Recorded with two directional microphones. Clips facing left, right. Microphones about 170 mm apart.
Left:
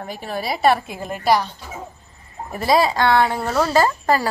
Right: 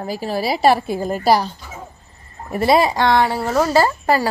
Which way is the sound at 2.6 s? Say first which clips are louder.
Right 2 dB; 15° right (ahead or behind).